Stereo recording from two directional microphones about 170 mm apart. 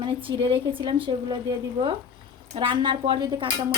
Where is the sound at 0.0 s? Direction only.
30° right (ahead or behind).